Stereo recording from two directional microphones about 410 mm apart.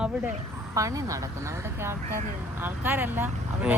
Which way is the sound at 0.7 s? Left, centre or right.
Centre.